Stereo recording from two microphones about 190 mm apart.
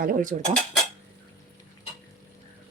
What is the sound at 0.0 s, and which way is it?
Speech, 45° right (ahead or behind).